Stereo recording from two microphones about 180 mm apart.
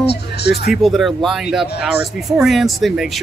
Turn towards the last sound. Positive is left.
turn(degrees=0)  # may be behind; listen again after turning